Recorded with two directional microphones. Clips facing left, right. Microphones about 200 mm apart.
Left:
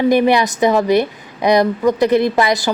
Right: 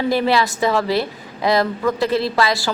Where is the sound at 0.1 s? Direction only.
20° left (ahead or behind).